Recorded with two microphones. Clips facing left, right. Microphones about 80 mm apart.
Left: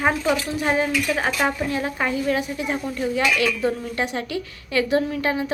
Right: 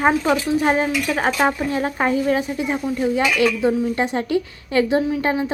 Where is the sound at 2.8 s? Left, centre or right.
Centre.